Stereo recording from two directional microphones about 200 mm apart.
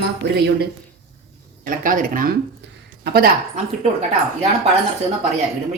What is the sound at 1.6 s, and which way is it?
Speech, 45° right (ahead or behind).